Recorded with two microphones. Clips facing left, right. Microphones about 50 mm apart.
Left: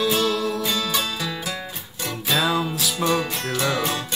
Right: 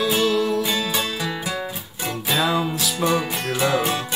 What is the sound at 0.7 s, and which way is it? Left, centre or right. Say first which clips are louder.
Music: right 1 dB; centre.